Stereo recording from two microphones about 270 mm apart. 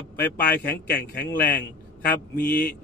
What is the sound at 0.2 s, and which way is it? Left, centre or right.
A man's voice, centre.